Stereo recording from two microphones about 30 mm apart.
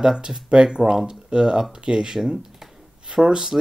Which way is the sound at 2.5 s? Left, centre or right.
Centre.